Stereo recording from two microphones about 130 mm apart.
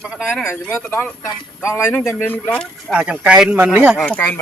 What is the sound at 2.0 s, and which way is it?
Speech, 15° left (ahead or behind).